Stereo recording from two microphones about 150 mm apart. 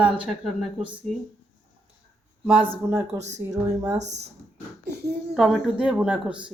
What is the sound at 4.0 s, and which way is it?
Speech, 50° right (ahead or behind).